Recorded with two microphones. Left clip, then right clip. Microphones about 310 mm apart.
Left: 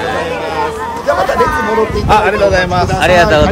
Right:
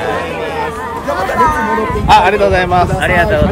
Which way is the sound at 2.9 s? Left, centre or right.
Centre.